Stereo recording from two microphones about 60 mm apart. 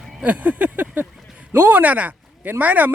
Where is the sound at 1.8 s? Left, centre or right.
Right.